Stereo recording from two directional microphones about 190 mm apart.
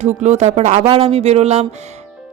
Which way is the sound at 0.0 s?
35° right (ahead or behind).